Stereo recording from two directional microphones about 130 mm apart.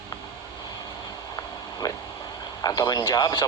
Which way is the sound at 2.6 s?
30° left (ahead or behind).